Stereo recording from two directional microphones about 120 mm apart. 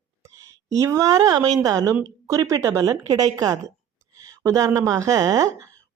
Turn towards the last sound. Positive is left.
turn(degrees=-30)  # may be behind; listen again after turning